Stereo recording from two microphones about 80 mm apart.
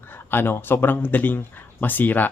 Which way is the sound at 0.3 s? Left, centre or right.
Left.